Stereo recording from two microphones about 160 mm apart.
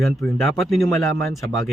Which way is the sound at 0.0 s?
Centre (ahead or behind).